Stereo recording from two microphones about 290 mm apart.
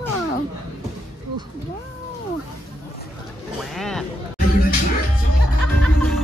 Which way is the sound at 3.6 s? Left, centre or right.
Centre.